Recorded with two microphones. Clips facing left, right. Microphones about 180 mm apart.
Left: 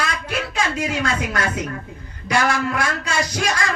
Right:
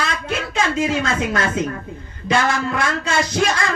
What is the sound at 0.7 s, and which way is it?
Speech, 25° right (ahead or behind).